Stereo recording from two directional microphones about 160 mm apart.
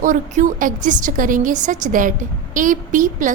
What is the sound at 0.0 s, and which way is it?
A woman's voice, 55° right (ahead or behind).